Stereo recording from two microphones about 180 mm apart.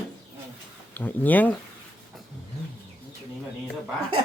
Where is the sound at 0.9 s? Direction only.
10° left (ahead or behind).